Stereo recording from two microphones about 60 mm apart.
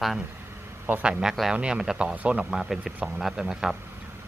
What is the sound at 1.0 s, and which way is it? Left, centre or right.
Speech, centre.